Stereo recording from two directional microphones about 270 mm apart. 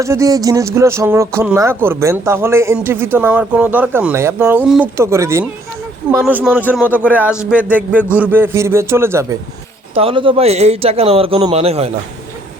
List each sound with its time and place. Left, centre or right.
0.0 s speech: centre
9.9 s a man's voice: right